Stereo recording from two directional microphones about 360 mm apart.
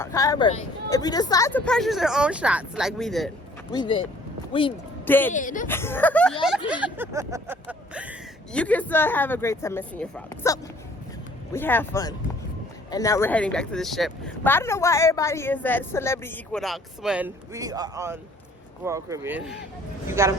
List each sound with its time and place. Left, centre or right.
0.0 s speech: centre
3.7 s speech: centre
5.3 s speech: left
5.6 s speech: centre